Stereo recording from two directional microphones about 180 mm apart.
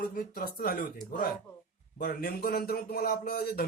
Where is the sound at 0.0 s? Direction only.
50° left (ahead or behind).